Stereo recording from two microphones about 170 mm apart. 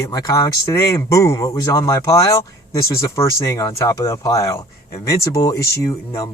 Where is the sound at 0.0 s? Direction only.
20° left (ahead or behind).